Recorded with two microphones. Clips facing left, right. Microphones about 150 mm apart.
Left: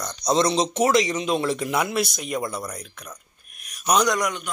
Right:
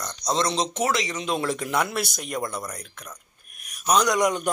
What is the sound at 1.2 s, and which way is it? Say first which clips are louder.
Speech: left 3 dB; 5° left (ahead or behind).